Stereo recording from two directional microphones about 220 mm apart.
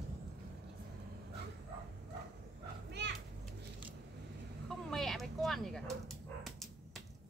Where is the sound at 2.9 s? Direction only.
50° right (ahead or behind).